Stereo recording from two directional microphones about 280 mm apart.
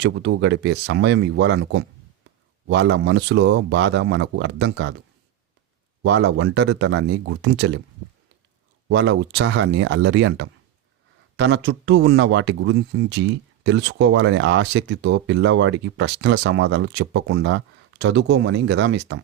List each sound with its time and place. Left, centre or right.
0.0 s speech: right
6.0 s speech: right
8.9 s speech: right